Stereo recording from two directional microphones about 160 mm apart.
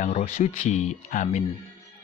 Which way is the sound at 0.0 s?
40° left (ahead or behind).